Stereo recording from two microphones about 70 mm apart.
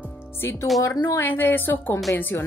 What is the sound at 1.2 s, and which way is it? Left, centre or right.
A woman's voice, left.